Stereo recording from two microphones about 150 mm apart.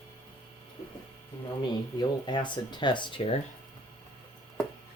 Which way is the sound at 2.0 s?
30° left (ahead or behind).